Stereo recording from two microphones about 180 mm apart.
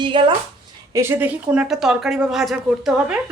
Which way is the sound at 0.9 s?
15° right (ahead or behind).